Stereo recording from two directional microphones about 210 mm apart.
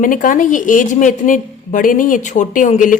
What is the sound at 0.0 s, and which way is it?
A woman's voice, 40° left (ahead or behind).